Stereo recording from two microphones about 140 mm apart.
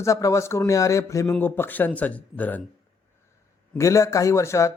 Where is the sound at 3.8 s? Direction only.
20° left (ahead or behind).